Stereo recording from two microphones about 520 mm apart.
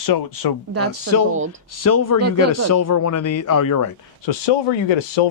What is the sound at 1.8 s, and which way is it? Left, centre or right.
Speech, left.